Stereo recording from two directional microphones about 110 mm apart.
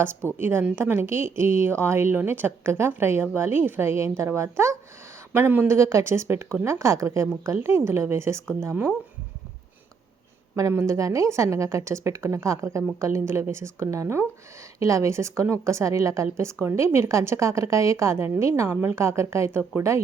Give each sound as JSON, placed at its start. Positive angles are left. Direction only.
{"t": 0.0, "sound": "a woman's voice", "side_deg": -20}
{"t": 10.5, "sound": "a woman's voice", "side_deg": -25}